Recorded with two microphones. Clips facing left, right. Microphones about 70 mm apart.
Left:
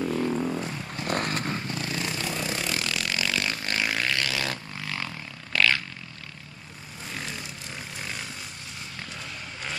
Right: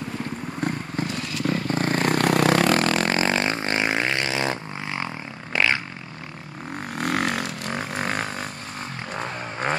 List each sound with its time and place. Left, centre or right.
0.6 s vehicle: right
1.0 s vehicle: left
1.7 s vehicle: right
7.0 s vehicle: right
9.1 s a sound: right